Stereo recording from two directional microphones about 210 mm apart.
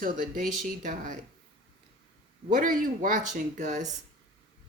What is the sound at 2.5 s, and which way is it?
Speech, 40° right (ahead or behind).